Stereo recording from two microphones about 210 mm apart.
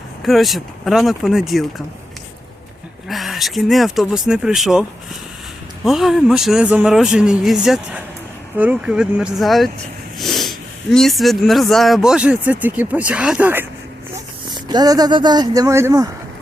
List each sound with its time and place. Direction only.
0.2 s speech: centre (ahead or behind)
3.1 s speech: centre (ahead or behind)
14.5 s speech: 20° right (ahead or behind)